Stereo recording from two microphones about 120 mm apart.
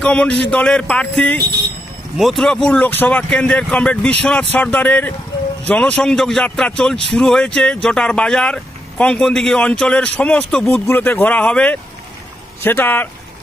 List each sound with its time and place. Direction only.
0.0 s speech: 10° left (ahead or behind)